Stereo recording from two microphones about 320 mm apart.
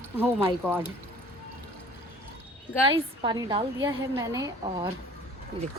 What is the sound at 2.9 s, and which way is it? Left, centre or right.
A woman's voice, centre.